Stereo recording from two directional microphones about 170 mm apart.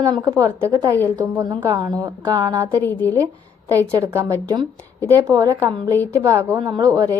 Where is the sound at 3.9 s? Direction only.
20° right (ahead or behind).